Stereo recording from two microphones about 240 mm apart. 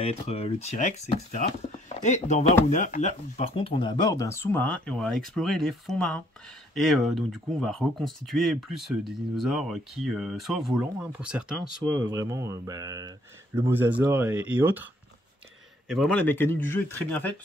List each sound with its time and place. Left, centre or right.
0.0 s speech: left; by 11.5 s centre
11.8 s speech: centre
15.9 s speech: centre